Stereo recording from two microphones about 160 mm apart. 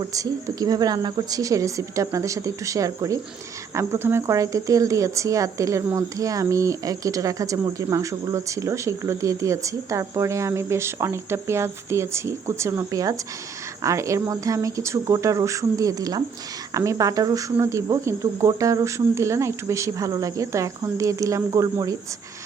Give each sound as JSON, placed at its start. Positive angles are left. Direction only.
{"t": 0.0, "sound": "speech", "side_deg": -20}